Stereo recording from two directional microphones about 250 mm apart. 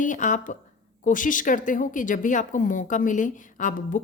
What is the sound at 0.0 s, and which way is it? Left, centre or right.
A woman's voice, left.